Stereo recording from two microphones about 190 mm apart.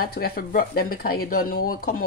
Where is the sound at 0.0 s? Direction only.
50° left (ahead or behind).